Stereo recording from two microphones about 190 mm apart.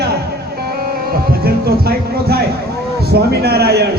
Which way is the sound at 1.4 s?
55° right (ahead or behind).